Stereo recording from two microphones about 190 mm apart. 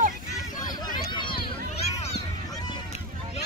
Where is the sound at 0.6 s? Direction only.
20° left (ahead or behind).